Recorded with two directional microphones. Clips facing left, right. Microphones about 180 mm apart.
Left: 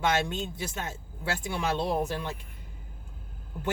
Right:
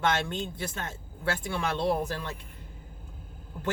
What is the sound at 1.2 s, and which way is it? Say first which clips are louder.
Speech: right 1 dB; 15° left (ahead or behind).